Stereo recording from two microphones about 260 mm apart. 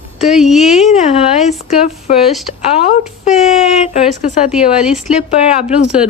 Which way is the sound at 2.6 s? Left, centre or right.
Left.